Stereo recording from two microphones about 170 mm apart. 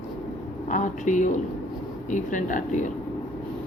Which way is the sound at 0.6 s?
45° left (ahead or behind).